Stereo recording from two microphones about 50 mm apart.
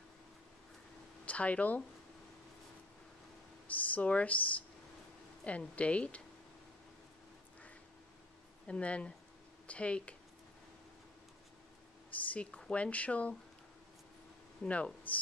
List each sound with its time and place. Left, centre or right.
1.2 s speech: left
3.6 s speech: left
8.6 s speech: left
12.3 s speech: left
14.6 s speech: left